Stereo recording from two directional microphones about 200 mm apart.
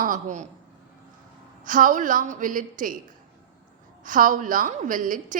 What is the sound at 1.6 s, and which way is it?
A woman's voice, 40° right (ahead or behind).